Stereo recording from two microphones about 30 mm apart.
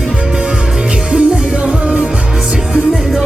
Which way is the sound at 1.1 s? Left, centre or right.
Right.